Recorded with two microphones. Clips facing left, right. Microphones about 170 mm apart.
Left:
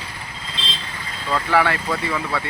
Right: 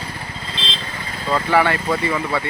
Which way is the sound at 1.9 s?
15° right (ahead or behind).